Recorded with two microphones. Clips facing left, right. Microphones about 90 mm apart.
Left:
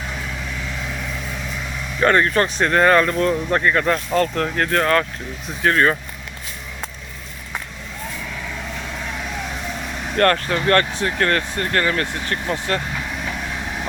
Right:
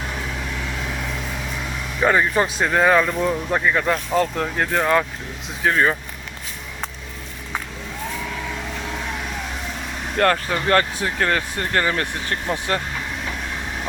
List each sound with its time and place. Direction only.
2.0 s speech: 10° right (ahead or behind)
10.2 s speech: 10° right (ahead or behind)